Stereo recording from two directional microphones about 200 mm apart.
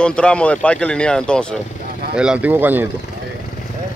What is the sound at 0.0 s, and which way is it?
Speech, 5° left (ahead or behind).